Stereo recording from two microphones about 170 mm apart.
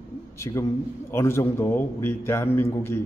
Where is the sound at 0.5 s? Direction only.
20° left (ahead or behind).